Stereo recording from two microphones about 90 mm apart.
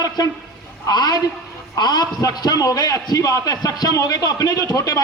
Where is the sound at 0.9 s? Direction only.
50° left (ahead or behind).